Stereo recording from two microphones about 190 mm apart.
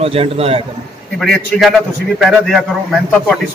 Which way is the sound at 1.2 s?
Centre (ahead or behind).